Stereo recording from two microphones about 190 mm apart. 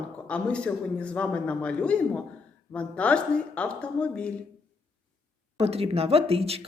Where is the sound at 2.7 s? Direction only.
5° left (ahead or behind).